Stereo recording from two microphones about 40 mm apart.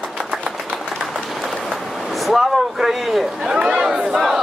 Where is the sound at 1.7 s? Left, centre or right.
Centre.